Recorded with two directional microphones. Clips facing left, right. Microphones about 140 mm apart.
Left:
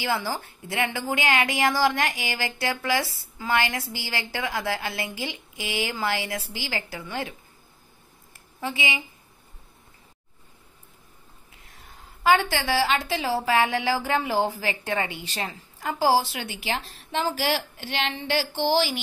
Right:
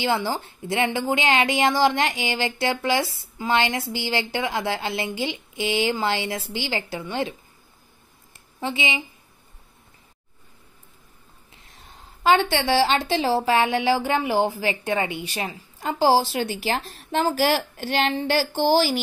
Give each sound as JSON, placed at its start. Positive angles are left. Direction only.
{"t": 0.0, "sound": "a woman's voice", "side_deg": -20}
{"t": 8.5, "sound": "a woman's voice", "side_deg": -25}
{"t": 12.2, "sound": "a woman's voice", "side_deg": -25}
{"t": 15.8, "sound": "speech", "side_deg": -25}